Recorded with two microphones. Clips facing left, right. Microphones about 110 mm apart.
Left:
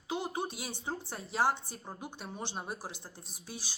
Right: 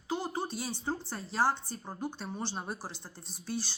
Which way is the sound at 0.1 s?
20° left (ahead or behind).